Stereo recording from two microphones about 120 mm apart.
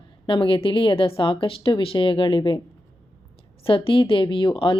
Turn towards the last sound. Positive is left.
turn(degrees=45)  # may be behind; listen again after turning